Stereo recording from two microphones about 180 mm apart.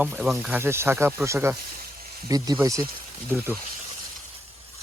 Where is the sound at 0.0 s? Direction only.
5° right (ahead or behind).